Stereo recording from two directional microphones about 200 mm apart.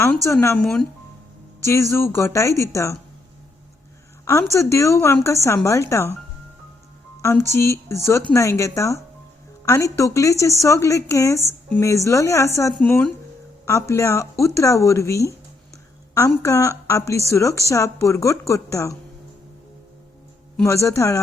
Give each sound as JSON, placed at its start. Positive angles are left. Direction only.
{"t": 0.3, "sound": "speech", "side_deg": 10}
{"t": 1.6, "sound": "a woman's voice", "side_deg": 15}
{"t": 4.5, "sound": "a woman's voice", "side_deg": 15}
{"t": 7.2, "sound": "a woman's voice", "side_deg": 15}
{"t": 20.7, "sound": "a woman's voice", "side_deg": 15}